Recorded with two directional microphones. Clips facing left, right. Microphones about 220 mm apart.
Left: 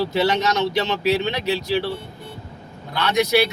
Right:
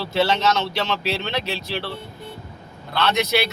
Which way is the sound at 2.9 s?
15° left (ahead or behind).